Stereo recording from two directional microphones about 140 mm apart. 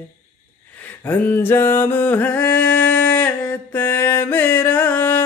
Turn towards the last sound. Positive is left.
turn(degrees=15)  # may be behind; listen again after turning